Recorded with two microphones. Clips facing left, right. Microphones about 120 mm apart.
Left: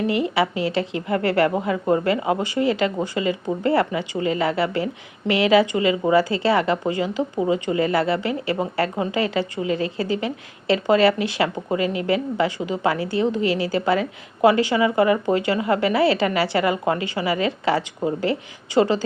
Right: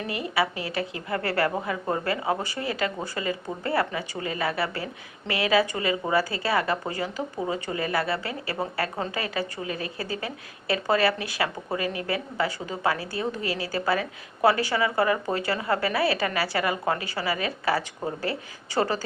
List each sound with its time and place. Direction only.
0.1 s a woman's voice: 25° left (ahead or behind)